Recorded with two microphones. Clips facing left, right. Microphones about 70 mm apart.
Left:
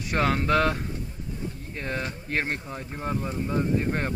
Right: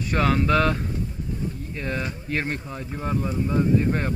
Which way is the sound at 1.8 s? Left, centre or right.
Left.